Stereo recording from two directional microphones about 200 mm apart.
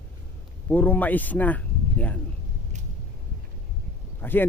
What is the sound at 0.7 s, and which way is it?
Speech, 10° left (ahead or behind).